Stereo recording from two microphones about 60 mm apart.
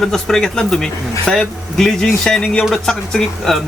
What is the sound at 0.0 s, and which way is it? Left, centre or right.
A man's voice, centre.